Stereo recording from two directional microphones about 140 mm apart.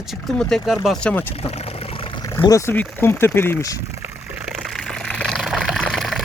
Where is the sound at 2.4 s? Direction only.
25° left (ahead or behind).